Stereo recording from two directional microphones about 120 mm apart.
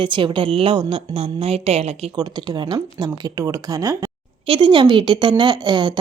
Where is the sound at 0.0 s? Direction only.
45° right (ahead or behind); by 2.0 s 60° right (ahead or behind).